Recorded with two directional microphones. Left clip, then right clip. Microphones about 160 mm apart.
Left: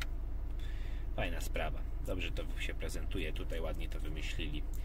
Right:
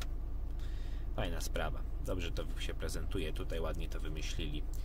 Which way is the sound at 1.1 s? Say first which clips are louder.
Even; 15° right (ahead or behind).